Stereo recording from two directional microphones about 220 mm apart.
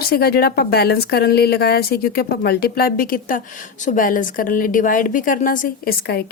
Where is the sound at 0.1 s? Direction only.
45° left (ahead or behind).